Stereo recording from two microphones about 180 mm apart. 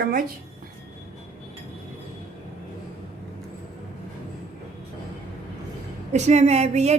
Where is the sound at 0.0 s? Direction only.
55° right (ahead or behind).